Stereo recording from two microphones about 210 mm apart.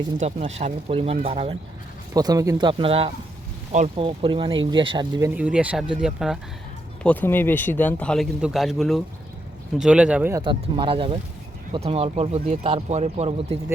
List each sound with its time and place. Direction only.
0.2 s speech: 30° right (ahead or behind)
5.3 s speech: 5° right (ahead or behind)
7.0 s a man's voice: 10° left (ahead or behind); by 10.4 s 10° right (ahead or behind)
10.4 s speech: 25° right (ahead or behind)